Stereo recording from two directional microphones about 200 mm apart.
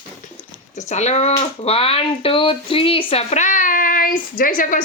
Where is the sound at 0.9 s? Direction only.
35° left (ahead or behind).